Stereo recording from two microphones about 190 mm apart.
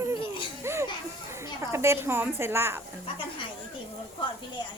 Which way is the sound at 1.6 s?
15° right (ahead or behind).